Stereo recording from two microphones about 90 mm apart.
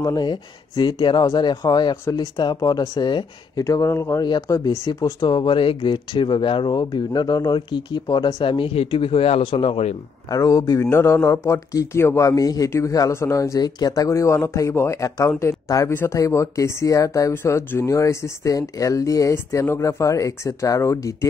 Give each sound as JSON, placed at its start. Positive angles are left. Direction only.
{"t": 0.0, "sound": "speech", "side_deg": 50}
{"t": 3.1, "sound": "speech", "side_deg": 55}
{"t": 3.7, "sound": "speech", "side_deg": 35}
{"t": 4.5, "sound": "speech", "side_deg": 45}
{"t": 8.4, "sound": "speech", "side_deg": 70}
{"t": 10.3, "sound": "speech", "side_deg": 40}
{"t": 15.9, "sound": "speech", "side_deg": 25}
{"t": 16.2, "sound": "speech", "side_deg": 35}